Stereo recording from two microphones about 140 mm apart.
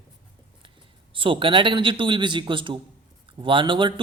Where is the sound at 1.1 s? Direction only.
40° right (ahead or behind).